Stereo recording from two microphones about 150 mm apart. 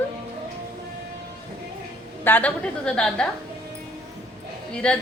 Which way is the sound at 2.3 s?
10° left (ahead or behind).